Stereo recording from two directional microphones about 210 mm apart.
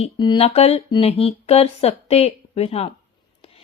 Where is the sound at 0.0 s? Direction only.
25° left (ahead or behind).